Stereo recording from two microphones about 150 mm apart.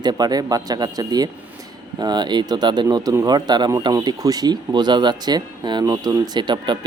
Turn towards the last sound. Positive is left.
turn(degrees=-30)  # may be behind; listen again after turning